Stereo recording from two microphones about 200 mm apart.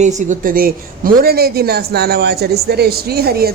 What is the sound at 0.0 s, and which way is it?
A woman's voice, 35° right (ahead or behind).